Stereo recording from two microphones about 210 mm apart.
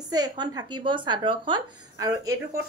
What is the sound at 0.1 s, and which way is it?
A woman's voice, 20° right (ahead or behind).